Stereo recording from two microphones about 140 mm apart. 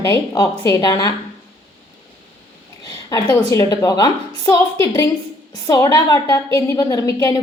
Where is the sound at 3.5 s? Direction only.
20° left (ahead or behind).